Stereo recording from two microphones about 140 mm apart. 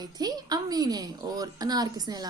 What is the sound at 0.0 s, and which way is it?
A woman's voice, 30° right (ahead or behind).